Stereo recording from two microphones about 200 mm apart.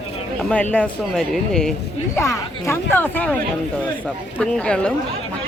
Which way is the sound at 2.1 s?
15° left (ahead or behind).